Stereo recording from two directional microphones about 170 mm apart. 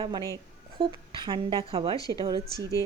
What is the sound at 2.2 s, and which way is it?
Speech, 30° right (ahead or behind).